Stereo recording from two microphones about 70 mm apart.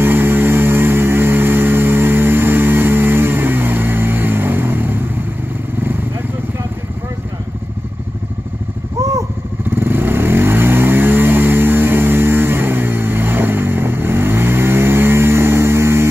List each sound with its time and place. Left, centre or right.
0.0 s music: right
5.8 s vehicle: right
9.8 s vehicle: right